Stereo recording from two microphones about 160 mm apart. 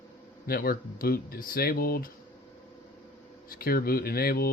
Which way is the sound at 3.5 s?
65° left (ahead or behind).